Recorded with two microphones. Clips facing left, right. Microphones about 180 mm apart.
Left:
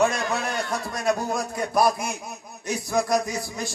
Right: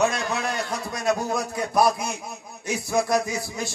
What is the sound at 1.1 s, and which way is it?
A man's voice, centre (ahead or behind).